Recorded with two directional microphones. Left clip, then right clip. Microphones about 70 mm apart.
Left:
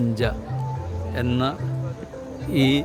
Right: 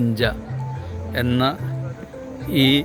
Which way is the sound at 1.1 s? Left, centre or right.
Right.